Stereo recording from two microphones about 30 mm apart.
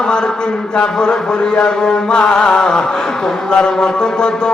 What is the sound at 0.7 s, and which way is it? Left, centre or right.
Mantra, left.